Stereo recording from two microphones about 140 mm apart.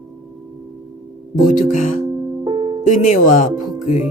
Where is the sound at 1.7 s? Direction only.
65° left (ahead or behind).